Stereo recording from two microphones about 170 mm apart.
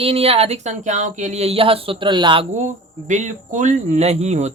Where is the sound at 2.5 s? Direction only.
45° right (ahead or behind).